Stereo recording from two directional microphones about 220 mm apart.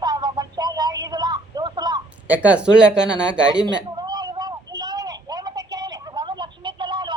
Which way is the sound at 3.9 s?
20° right (ahead or behind).